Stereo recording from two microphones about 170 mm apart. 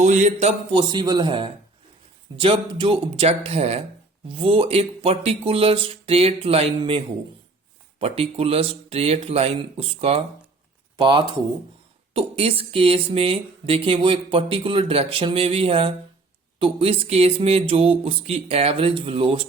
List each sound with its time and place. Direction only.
0.0 s speech: 45° right (ahead or behind)